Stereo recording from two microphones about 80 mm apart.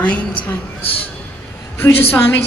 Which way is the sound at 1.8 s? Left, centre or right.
Left.